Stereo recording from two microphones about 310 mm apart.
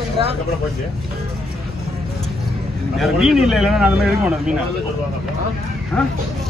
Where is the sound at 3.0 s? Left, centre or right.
Centre.